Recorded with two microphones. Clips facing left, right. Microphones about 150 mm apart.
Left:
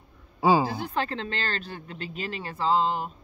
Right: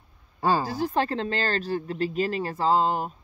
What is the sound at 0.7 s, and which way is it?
Speech, 40° right (ahead or behind).